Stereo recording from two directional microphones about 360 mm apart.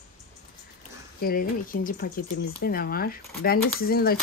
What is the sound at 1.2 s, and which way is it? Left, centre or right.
Speech, left.